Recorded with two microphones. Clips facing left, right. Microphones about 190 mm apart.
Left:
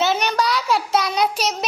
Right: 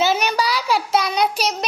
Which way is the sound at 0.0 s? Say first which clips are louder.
Right 1 dB; centre (ahead or behind).